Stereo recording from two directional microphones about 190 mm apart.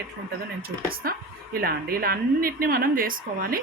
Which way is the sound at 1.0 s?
50° right (ahead or behind).